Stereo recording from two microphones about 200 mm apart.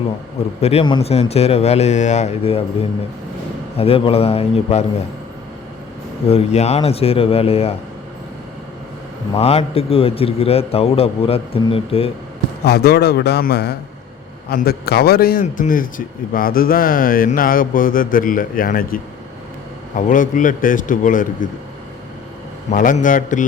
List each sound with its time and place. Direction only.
0.6 s speech: 30° left (ahead or behind)
3.8 s a man's voice: 30° left (ahead or behind)
6.2 s speech: 30° left (ahead or behind)
9.3 s a man's voice: 30° left (ahead or behind)
12.6 s a man's voice: 50° left (ahead or behind)
20.0 s speech: 40° left (ahead or behind)
22.7 s speech: 40° left (ahead or behind)